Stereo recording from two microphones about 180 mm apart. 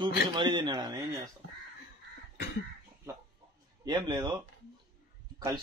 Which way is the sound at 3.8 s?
25° right (ahead or behind).